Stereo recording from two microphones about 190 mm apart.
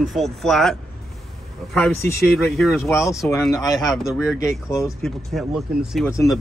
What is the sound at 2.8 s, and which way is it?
Speech, 15° left (ahead or behind).